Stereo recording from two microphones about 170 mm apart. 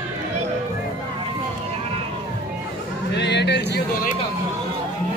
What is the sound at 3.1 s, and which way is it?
Speech, 90° left.